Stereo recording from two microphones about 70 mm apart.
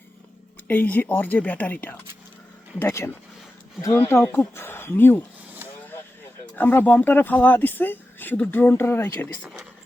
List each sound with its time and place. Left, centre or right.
0.7 s speech: left
2.7 s speech: left
6.6 s speech: left